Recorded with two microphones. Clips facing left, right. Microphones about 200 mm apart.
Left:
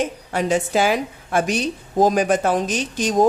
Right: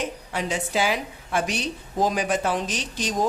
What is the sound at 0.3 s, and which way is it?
A woman's voice, 45° left (ahead or behind).